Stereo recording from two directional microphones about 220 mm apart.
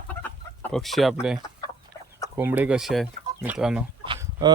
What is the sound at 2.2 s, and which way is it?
Speech, 10° right (ahead or behind).